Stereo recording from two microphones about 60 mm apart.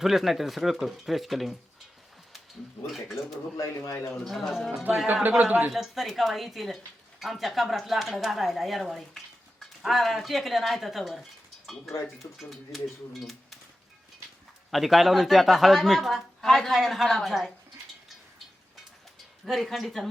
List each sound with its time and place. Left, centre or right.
0.0 s speech: centre
2.8 s speech: centre
3.6 s speech: left
3.9 s speech: left
4.2 s speech: centre
5.4 s speech: right
5.7 s speech: centre
14.7 s speech: centre
19.5 s speech: centre